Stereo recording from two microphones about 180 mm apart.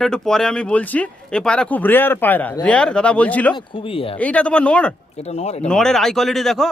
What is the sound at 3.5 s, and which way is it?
Speech, 30° left (ahead or behind).